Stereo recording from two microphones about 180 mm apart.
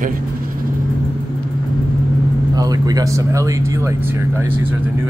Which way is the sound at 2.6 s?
20° right (ahead or behind).